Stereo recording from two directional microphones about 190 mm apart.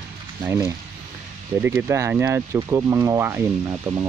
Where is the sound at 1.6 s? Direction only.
10° right (ahead or behind).